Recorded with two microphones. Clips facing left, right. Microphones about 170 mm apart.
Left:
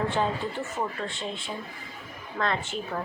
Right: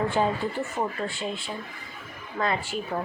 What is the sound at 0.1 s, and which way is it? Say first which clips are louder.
Speech: right 2 dB; 5° right (ahead or behind).